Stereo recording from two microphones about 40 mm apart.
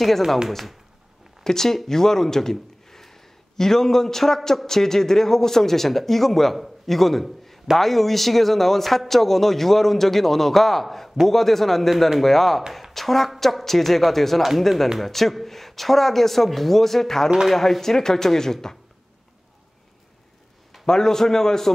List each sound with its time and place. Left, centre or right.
0.5 s a man's voice: centre
1.4 s a man's voice: centre
20.8 s speech: centre